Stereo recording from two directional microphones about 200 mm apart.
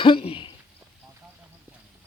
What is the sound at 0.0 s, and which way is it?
Speech, 25° left (ahead or behind).